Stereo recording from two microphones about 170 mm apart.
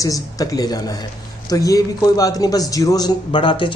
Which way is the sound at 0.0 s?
20° left (ahead or behind).